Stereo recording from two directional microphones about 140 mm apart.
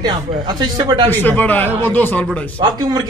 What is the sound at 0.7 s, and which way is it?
Speech, 30° right (ahead or behind).